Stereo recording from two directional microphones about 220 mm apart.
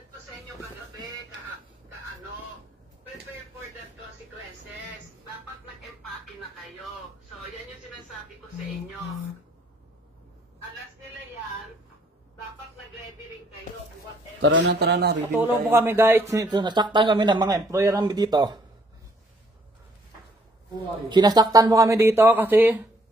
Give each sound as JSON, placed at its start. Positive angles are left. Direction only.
{"t": 14.4, "sound": "speech", "side_deg": -55}
{"t": 15.3, "sound": "speech", "side_deg": -10}
{"t": 21.1, "sound": "speech", "side_deg": -20}